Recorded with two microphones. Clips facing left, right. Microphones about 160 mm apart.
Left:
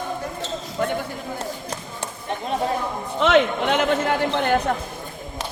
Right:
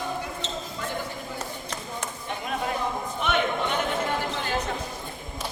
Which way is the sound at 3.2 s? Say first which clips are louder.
Left 9 dB; 90° left.